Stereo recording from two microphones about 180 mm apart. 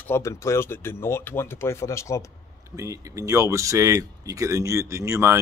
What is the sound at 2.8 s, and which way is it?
Speech, 15° right (ahead or behind).